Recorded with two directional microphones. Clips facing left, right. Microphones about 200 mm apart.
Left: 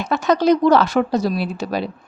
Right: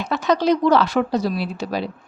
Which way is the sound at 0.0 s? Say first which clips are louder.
Left 2 dB; 50° left (ahead or behind).